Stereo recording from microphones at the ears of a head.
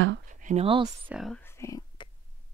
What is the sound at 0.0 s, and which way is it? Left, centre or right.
Speech, right.